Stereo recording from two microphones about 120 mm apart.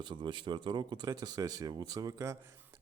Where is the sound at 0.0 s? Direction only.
40° right (ahead or behind).